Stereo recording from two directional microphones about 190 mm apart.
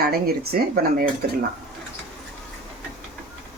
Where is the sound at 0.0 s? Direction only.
55° right (ahead or behind).